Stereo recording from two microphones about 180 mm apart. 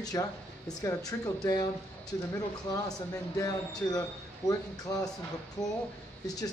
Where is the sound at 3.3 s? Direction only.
20° left (ahead or behind).